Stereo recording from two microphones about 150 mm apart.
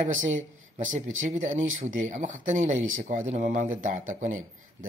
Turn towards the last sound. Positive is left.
turn(degrees=-60)  # may be behind; listen again after turning